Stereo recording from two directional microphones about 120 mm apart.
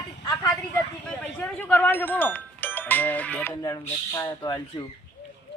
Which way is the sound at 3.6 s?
30° left (ahead or behind).